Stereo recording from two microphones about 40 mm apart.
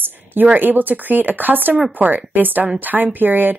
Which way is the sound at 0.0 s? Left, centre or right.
Right.